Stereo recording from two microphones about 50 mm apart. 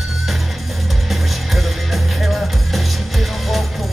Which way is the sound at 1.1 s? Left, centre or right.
Centre.